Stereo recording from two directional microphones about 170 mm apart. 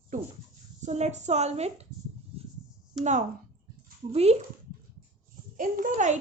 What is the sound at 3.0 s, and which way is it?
Speech, centre (ahead or behind).